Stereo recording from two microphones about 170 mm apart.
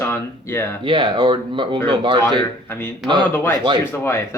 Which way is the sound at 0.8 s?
30° right (ahead or behind).